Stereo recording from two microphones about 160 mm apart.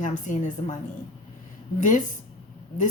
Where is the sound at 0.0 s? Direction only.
50° left (ahead or behind).